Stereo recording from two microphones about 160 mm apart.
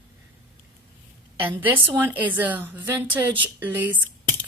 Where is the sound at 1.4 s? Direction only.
10° right (ahead or behind).